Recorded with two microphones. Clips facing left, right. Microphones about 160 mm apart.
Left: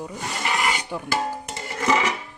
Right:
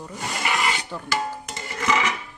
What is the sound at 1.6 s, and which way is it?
Music, 35° left (ahead or behind).